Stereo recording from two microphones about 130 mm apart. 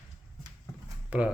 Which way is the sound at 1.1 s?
10° right (ahead or behind).